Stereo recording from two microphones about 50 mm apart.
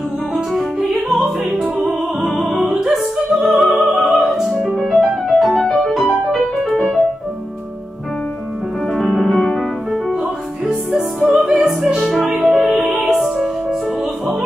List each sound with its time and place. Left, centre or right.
0.3 s music: centre
1.6 s opera: centre
3.4 s music: centre
4.6 s music: right
4.8 s music: centre
8.9 s music: centre
11.2 s opera: centre
12.4 s music: centre